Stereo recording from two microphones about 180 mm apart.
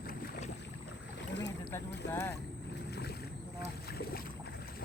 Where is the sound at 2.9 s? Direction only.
65° left (ahead or behind).